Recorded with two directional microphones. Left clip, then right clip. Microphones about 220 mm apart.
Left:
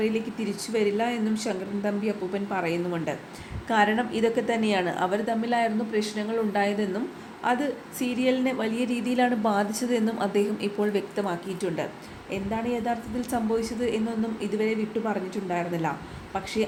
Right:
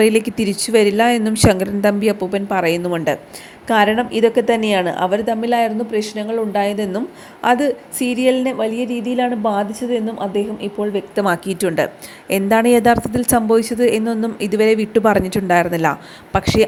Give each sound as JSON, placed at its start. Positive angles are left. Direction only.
{"t": 0.0, "sound": "a woman's voice", "side_deg": -40}
{"t": 11.3, "sound": "a woman's voice", "side_deg": -40}